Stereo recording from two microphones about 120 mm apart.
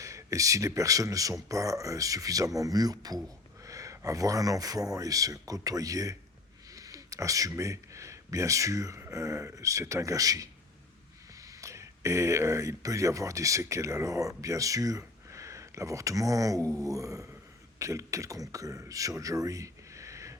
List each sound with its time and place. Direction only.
0.0 s speech: 25° right (ahead or behind)